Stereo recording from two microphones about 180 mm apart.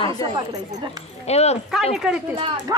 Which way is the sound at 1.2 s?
35° left (ahead or behind).